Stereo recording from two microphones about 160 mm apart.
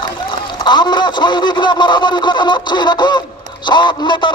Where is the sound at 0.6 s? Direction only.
25° left (ahead or behind).